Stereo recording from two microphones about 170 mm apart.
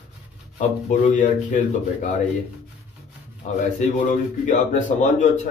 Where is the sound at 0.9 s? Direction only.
45° left (ahead or behind).